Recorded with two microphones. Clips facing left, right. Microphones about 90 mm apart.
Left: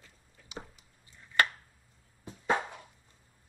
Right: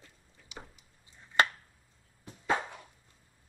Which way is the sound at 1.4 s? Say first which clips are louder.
Right 1 dB; 25° right (ahead or behind).